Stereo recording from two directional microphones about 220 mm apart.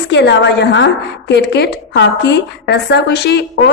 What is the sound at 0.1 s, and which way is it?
A woman's voice, 50° left (ahead or behind).